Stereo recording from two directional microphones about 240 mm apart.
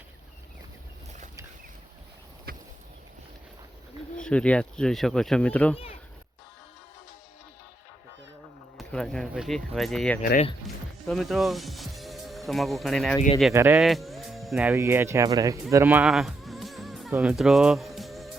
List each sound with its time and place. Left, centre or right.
2.5 s a sound: right
4.2 s speech: centre
5.7 s speech: left
8.8 s speech: centre
10.7 s music: centre
11.0 s speech: centre
13.5 s speech: centre
15.7 s music: centre
17.1 s speech: centre